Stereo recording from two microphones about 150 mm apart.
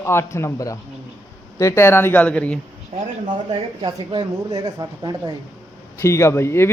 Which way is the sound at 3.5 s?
30° right (ahead or behind).